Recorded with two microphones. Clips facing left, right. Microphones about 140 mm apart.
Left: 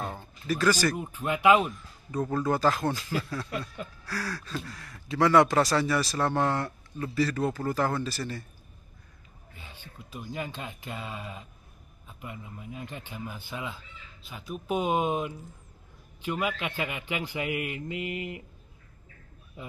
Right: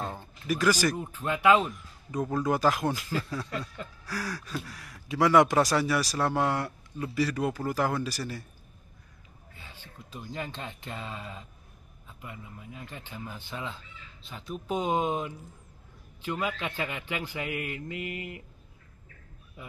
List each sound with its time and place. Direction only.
0.2 s speech: 15° right (ahead or behind)
0.9 s speech: 15° left (ahead or behind)
2.2 s speech: 10° right (ahead or behind)
3.4 s speech: 15° left (ahead or behind)
4.1 s speech: 15° right (ahead or behind)
9.6 s speech: 15° left (ahead or behind)